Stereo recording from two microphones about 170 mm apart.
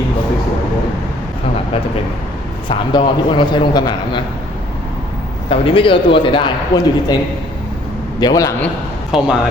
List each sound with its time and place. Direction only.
2.6 s a man's voice: 25° left (ahead or behind)
5.5 s a man's voice: 30° left (ahead or behind)
8.2 s a man's voice: 20° left (ahead or behind)
9.1 s speech: centre (ahead or behind)